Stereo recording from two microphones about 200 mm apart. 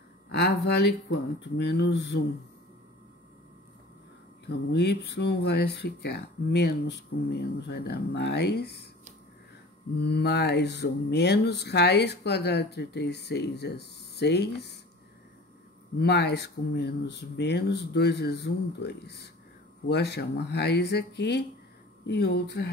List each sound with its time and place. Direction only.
0.3 s speech: 55° left (ahead or behind)
4.5 s speech: 55° left (ahead or behind)
9.9 s speech: 55° left (ahead or behind)
16.0 s speech: 55° left (ahead or behind)